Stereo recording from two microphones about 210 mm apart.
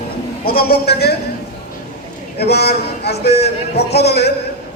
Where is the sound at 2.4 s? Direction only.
50° left (ahead or behind).